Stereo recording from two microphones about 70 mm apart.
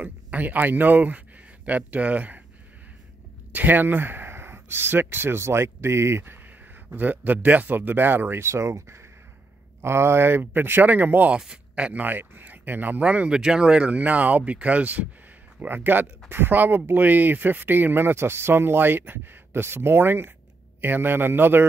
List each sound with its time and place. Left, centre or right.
0.0 s speech: right
3.5 s speech: right
6.9 s speech: right
11.3 s speech: centre; by 21.6 s right